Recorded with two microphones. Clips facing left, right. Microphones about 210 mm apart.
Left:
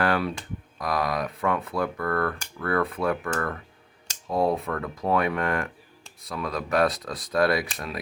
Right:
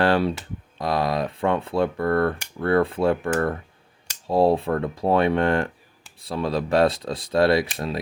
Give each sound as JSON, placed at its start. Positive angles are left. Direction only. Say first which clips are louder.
{"t": 0.0, "sound": "computer keyboard", "louder": "right 5 dB", "side_deg": -30}
{"t": 0.8, "sound": "speech", "louder": "right 4 dB", "side_deg": -25}